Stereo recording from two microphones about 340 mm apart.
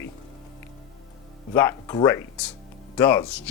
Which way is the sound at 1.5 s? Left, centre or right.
Centre.